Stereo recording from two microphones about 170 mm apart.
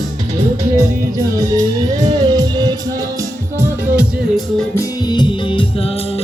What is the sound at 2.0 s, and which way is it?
Music, 25° right (ahead or behind).